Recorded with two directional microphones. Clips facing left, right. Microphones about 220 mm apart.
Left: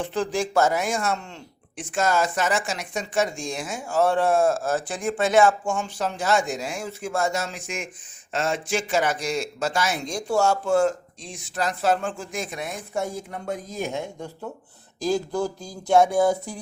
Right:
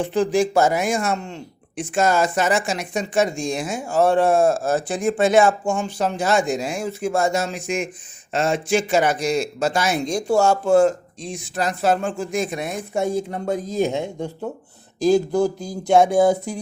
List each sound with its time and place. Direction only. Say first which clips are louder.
0.0 s speech: right 6 dB; 15° right (ahead or behind)